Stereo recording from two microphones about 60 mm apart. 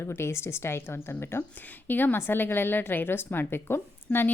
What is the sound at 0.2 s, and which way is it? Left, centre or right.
A woman's voice, left.